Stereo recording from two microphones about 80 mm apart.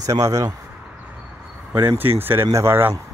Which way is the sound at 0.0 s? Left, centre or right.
Right.